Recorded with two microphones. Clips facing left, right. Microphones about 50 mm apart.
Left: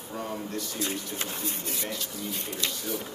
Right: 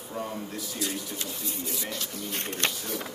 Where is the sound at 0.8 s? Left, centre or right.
Left.